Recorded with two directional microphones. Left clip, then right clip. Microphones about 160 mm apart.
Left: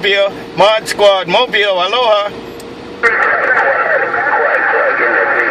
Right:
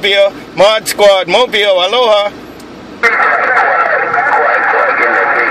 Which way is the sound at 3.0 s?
50° right (ahead or behind).